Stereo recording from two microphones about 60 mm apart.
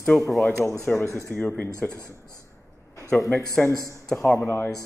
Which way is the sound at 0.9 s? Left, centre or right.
Centre.